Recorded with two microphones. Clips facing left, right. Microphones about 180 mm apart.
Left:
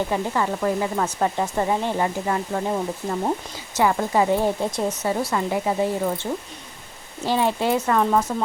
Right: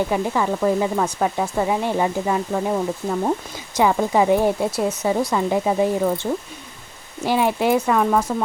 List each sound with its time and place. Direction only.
0.1 s speech: 10° right (ahead or behind)
2.5 s speech: centre (ahead or behind)
3.8 s speech: 15° right (ahead or behind)
7.3 s speech: 15° right (ahead or behind)